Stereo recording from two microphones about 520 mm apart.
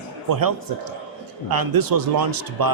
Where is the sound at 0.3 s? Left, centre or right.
Right.